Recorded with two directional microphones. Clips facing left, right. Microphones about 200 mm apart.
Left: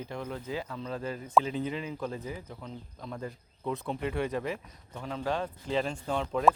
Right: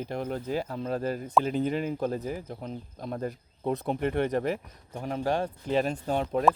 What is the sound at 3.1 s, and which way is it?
Speech, 40° right (ahead or behind).